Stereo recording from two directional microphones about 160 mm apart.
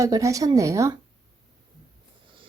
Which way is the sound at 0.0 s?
20° right (ahead or behind).